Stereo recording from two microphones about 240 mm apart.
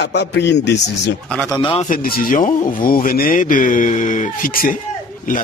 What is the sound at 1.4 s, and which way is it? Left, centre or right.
Speech, centre.